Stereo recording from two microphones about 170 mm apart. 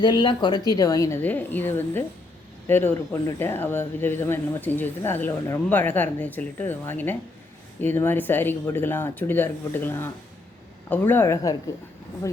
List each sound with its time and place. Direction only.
0.0 s speech: 25° left (ahead or behind)